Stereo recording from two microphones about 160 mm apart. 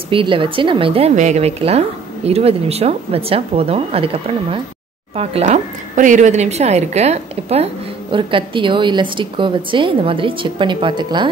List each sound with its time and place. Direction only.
0.1 s a woman's voice: 35° right (ahead or behind)